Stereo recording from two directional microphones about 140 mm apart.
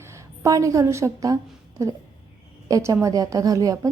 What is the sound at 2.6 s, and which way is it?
Speech, 25° right (ahead or behind).